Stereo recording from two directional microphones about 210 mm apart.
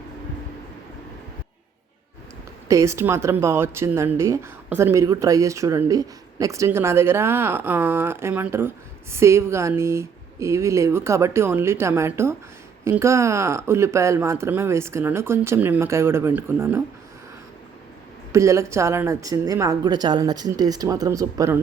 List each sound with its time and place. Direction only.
2.6 s speech: 15° right (ahead or behind)
18.3 s speech: 15° right (ahead or behind)